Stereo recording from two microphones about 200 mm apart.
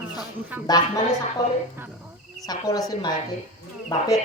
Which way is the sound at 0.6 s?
20° left (ahead or behind).